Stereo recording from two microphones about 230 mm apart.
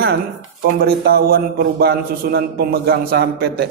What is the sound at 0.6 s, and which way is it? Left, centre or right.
A man's voice, right.